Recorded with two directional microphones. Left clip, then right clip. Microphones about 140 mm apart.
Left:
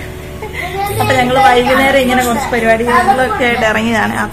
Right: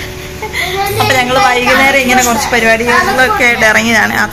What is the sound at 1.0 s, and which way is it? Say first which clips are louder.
A woman's voice: left 1 dB; 30° left (ahead or behind).